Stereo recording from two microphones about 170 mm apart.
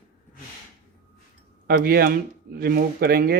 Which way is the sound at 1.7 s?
65° right (ahead or behind).